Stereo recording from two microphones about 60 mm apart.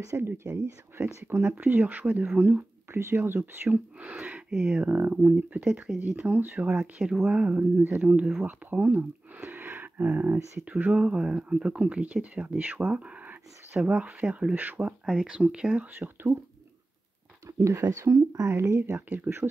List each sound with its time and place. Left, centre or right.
0.2 s speech: right
2.9 s speech: right
4.0 s speech: right
4.5 s speech: centre
4.7 s speech: right
6.8 s speech: centre
7.8 s speech: right
14.5 s speech: right
15.9 s speech: right
17.5 s speech: right
18.5 s speech: right
19.0 s speech: right